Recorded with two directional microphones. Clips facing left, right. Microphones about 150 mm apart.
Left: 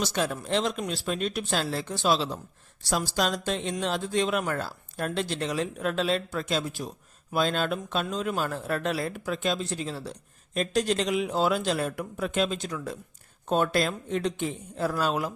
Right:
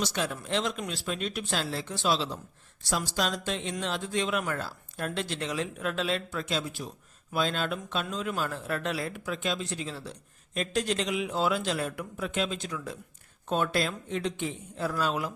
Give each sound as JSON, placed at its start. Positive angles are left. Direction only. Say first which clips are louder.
{"t": 0.0, "sound": "speech", "louder": "left 3 dB", "side_deg": 40}